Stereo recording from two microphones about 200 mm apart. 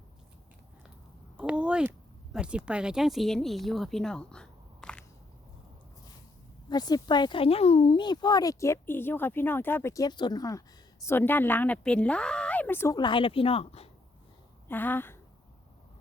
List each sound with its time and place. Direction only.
1.4 s speech: 5° right (ahead or behind)
6.7 s a woman's voice: 20° left (ahead or behind)
13.0 s speech: 25° left (ahead or behind)
14.7 s a woman's voice: 10° left (ahead or behind)